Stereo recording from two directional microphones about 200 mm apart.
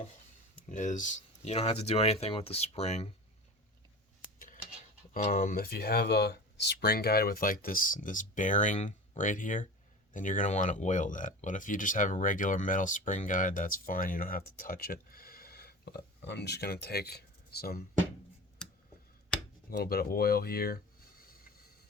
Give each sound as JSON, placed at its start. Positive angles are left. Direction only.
{"t": 0.7, "sound": "speech", "side_deg": 40}
{"t": 4.4, "sound": "dishes", "side_deg": 40}
{"t": 5.1, "sound": "speech", "side_deg": 45}
{"t": 19.7, "sound": "speech", "side_deg": 50}